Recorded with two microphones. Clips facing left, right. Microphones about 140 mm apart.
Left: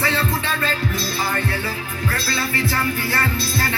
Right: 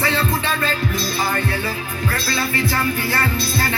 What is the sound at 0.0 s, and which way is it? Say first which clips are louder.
Music: right 2 dB; 20° right (ahead or behind).